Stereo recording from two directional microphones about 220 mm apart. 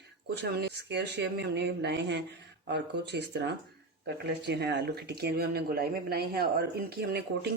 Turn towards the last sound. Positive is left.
turn(degrees=-45)  # may be behind; listen again after turning